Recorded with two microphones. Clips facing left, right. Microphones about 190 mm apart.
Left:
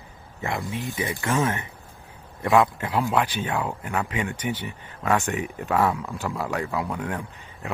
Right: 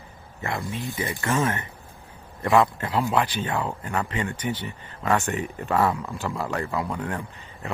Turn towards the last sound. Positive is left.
turn(degrees=10)  # may be behind; listen again after turning